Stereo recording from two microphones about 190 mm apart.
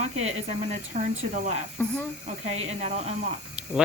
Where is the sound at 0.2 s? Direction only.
35° right (ahead or behind).